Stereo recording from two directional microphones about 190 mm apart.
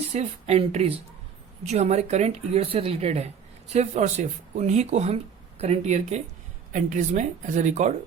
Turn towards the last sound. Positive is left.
turn(degrees=-40)  # may be behind; listen again after turning